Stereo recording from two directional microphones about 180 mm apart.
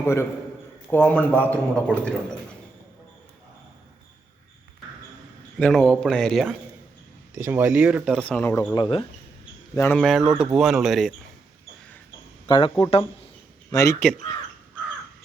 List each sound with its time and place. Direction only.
0.0 s a man's voice: 15° left (ahead or behind)
5.5 s speech: 5° left (ahead or behind)
7.3 s speech: 10° right (ahead or behind); by 8.7 s 10° left (ahead or behind)
8.7 s speech: 25° left (ahead or behind)
9.7 s a man's voice: 15° left (ahead or behind)
10.0 s speech: centre (ahead or behind)
12.5 s speech: 25° left (ahead or behind)